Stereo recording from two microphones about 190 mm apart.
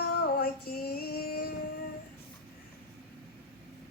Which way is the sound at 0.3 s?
55° left (ahead or behind).